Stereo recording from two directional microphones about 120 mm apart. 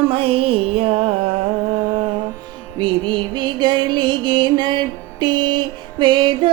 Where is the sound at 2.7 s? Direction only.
40° right (ahead or behind).